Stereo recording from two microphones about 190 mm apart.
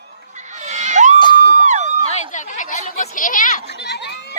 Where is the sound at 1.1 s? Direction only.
25° left (ahead or behind).